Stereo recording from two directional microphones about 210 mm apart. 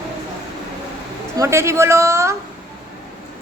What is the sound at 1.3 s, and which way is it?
A woman's voice, 15° right (ahead or behind).